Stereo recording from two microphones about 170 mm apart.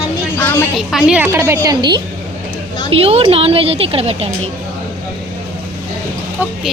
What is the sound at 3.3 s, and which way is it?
A woman's voice, 35° right (ahead or behind).